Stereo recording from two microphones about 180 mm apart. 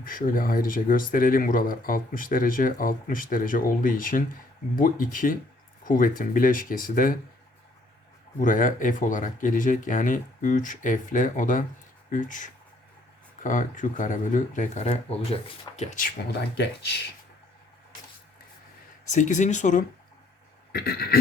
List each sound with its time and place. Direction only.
0.0 s speech: 50° left (ahead or behind)
8.4 s speech: 45° left (ahead or behind)
19.1 s speech: 40° left (ahead or behind)
20.7 s a sound: 55° left (ahead or behind)